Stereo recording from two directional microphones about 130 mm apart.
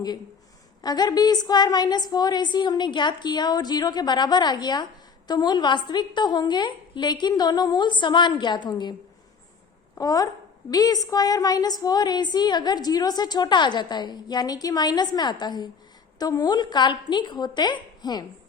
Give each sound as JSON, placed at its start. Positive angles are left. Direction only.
{"t": 0.8, "sound": "a woman's voice", "side_deg": 30}
{"t": 10.0, "sound": "a woman's voice", "side_deg": 30}